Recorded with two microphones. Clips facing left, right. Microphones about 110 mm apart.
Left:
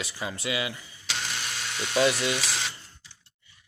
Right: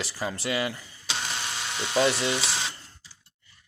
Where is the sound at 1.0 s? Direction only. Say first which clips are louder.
Right 1 dB; 25° right (ahead or behind).